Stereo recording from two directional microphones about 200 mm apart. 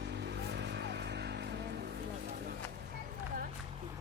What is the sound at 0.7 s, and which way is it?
Music, 60° right (ahead or behind).